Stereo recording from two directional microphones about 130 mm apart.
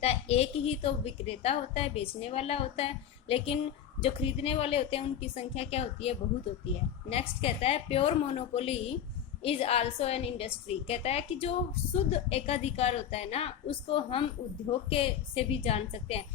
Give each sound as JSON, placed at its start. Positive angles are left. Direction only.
{"t": 0.0, "sound": "a woman's voice", "side_deg": 55}